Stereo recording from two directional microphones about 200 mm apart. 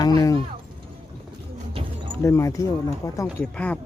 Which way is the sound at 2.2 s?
15° left (ahead or behind).